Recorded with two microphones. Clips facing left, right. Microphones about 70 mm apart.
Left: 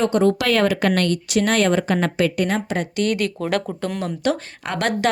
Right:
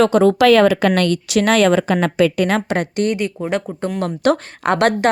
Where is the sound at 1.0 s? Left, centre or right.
Right.